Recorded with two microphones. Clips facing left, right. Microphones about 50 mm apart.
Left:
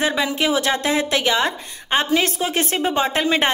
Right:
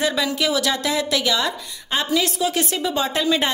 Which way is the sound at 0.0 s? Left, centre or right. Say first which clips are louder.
Left 1 dB; left.